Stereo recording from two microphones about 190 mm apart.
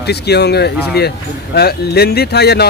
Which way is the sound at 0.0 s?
60° left (ahead or behind).